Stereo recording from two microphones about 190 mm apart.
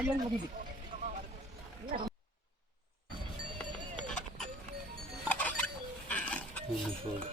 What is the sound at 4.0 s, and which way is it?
Clip-clop, 5° left (ahead or behind).